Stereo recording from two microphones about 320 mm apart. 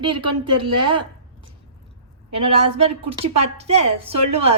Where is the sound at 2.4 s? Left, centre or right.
Centre.